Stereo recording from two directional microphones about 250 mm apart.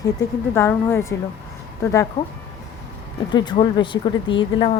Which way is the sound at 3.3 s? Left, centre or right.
Centre.